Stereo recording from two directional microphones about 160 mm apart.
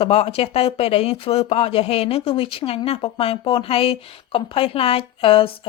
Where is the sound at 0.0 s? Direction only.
35° left (ahead or behind).